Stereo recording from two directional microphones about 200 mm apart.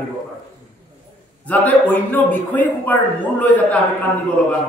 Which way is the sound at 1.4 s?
10° left (ahead or behind).